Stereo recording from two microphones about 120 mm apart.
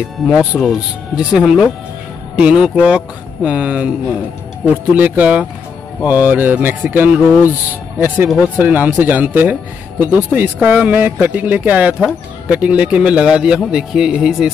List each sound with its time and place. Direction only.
0.3 s speech: 10° right (ahead or behind)